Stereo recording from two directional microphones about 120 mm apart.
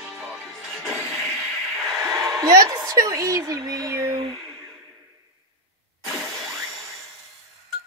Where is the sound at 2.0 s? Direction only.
25° right (ahead or behind).